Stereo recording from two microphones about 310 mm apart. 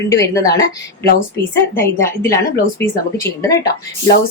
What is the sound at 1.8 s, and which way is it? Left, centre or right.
A woman's voice, centre.